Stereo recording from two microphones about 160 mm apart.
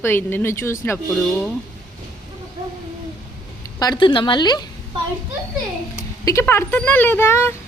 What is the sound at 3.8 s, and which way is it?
Speech, 25° left (ahead or behind).